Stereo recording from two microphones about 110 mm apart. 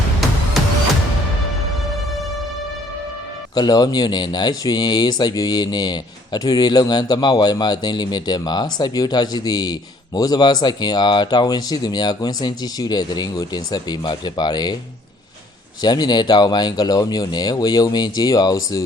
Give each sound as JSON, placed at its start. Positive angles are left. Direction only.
{"t": 0.6, "sound": "music", "side_deg": 0}
{"t": 3.5, "sound": "speech", "side_deg": 35}
{"t": 15.8, "sound": "speech", "side_deg": 40}